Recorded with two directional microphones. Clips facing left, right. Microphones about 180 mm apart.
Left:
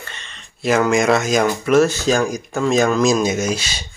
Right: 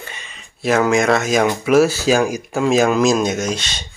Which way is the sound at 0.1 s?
5° right (ahead or behind).